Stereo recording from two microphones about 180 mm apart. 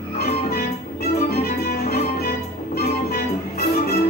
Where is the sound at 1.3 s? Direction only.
60° left (ahead or behind).